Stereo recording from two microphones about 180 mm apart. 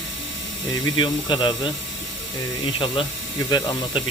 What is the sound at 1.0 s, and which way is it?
Speech, 25° left (ahead or behind).